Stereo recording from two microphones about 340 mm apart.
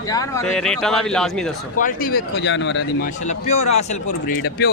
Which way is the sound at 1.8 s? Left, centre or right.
Left.